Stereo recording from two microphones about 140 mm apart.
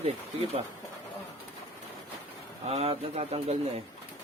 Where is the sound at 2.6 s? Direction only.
45° right (ahead or behind).